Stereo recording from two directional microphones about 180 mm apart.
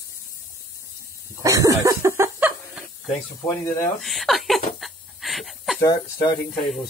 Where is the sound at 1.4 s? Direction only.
20° right (ahead or behind).